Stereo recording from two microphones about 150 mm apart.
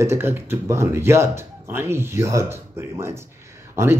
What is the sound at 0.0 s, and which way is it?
Speech, 15° right (ahead or behind).